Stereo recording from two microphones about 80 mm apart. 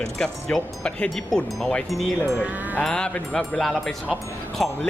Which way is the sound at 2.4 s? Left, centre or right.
Centre.